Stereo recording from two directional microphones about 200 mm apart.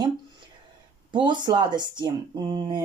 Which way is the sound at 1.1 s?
20° right (ahead or behind).